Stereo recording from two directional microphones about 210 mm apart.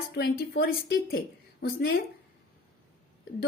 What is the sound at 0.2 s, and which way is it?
Speech, 50° left (ahead or behind).